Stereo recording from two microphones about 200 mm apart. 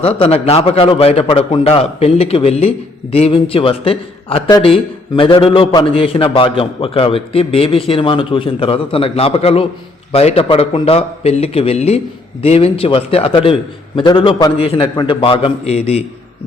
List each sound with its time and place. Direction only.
0.0 s a man's voice: 30° left (ahead or behind)